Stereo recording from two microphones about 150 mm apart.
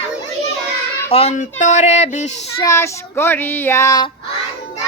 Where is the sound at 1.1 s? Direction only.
45° left (ahead or behind).